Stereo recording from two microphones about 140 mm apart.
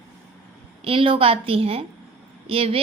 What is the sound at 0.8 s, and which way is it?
A woman's voice, 40° right (ahead or behind).